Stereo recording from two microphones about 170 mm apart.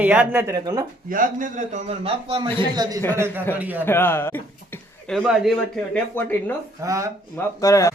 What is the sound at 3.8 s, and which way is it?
Speech, 15° left (ahead or behind).